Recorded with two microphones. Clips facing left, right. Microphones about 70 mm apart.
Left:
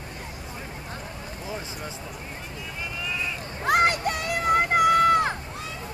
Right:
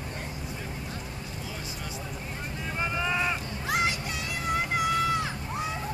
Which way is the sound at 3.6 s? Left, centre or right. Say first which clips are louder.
Left 8 dB; left.